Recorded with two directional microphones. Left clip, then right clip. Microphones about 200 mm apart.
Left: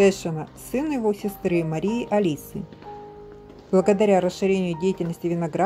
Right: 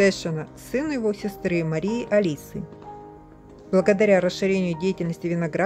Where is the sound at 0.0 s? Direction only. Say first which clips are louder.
Left 1 dB; 15° right (ahead or behind).